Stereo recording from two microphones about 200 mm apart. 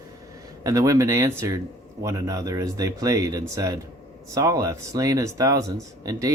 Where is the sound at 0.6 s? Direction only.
15° right (ahead or behind).